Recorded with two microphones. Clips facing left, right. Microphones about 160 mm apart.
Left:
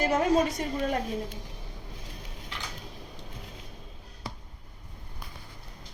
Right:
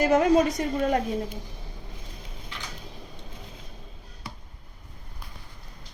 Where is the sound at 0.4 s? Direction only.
40° right (ahead or behind).